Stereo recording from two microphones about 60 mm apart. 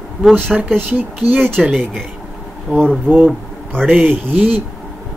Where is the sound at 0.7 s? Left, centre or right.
Right.